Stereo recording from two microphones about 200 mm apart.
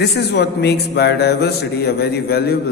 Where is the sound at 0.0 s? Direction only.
55° left (ahead or behind).